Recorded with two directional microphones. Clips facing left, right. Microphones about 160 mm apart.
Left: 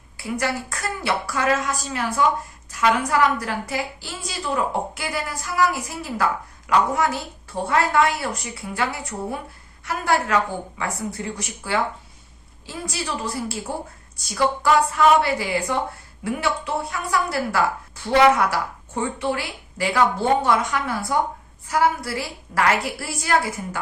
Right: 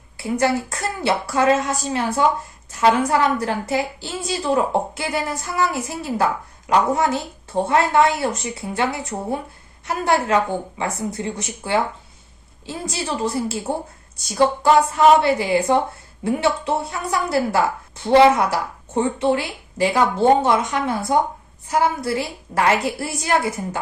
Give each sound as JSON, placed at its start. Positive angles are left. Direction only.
{"t": 0.2, "sound": "a woman's voice", "side_deg": -25}